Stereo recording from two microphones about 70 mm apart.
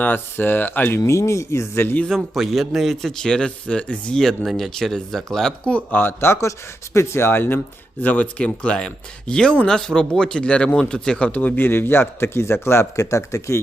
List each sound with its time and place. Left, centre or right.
0.0 s speech: left
1.0 s speech: left
2.0 s speech: centre
4.2 s speech: centre
5.6 s speech: left
11.3 s speech: left